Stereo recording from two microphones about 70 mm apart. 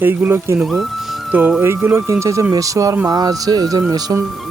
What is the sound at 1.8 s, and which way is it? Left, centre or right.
Speech, right.